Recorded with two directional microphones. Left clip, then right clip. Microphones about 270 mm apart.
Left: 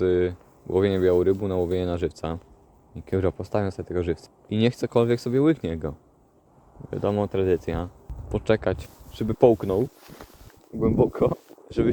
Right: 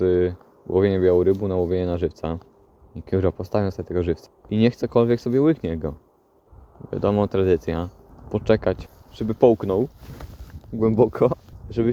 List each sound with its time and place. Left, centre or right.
0.0 s speech: centre
10.8 s speech: right
11.8 s speech: centre